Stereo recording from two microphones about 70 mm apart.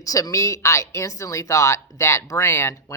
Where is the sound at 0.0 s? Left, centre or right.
Left.